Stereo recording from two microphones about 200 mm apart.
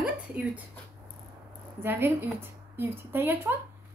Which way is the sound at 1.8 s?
10° right (ahead or behind).